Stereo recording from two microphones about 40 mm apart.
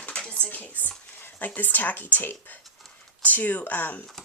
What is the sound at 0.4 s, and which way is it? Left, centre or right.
Speech, left.